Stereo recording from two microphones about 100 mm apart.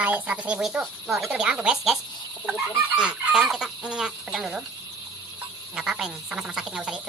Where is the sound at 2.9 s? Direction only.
10° right (ahead or behind).